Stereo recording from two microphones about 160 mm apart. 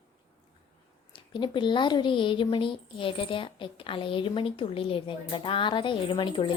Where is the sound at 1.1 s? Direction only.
30° left (ahead or behind).